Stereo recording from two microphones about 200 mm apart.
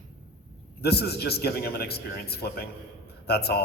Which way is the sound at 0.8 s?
55° left (ahead or behind).